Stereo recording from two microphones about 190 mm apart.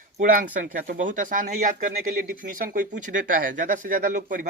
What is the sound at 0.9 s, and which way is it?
Speech, 45° right (ahead or behind).